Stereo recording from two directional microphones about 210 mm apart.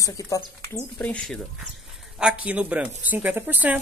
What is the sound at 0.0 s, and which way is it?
Speech, 15° left (ahead or behind).